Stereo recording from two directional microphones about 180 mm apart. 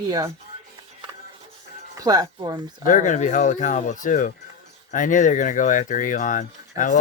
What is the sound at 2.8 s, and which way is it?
Speech, 45° left (ahead or behind).